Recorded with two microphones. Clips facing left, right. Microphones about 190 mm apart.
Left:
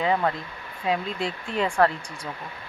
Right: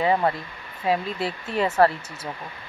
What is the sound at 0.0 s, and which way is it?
Speech, 5° right (ahead or behind).